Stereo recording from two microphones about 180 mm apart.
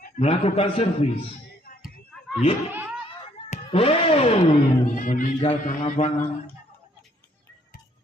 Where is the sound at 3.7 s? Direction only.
30° left (ahead or behind).